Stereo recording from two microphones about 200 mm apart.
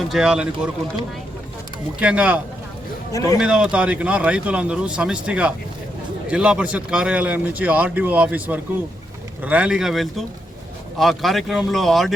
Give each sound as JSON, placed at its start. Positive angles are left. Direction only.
{"t": 0.1, "sound": "speech", "side_deg": 0}
{"t": 2.0, "sound": "a man's voice", "side_deg": -5}
{"t": 3.1, "sound": "a man's voice", "side_deg": 15}
{"t": 3.4, "sound": "a man's voice", "side_deg": -5}